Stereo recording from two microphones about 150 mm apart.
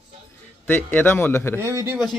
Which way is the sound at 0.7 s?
15° left (ahead or behind).